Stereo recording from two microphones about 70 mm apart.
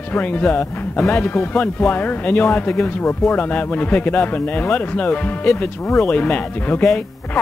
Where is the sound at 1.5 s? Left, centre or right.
Left.